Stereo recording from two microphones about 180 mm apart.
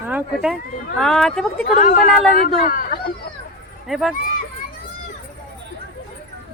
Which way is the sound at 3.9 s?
Centre (ahead or behind).